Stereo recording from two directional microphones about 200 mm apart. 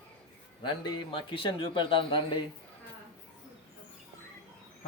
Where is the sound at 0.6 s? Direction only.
25° left (ahead or behind).